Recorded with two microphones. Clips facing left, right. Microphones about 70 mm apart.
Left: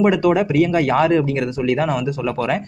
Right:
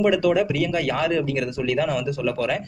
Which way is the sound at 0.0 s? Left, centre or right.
Left.